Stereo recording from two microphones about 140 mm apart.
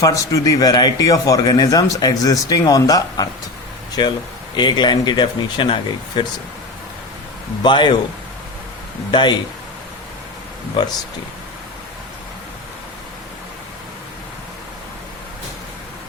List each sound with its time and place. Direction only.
0.0 s speech: 25° left (ahead or behind)
7.6 s speech: 35° left (ahead or behind)
9.1 s speech: 35° left (ahead or behind)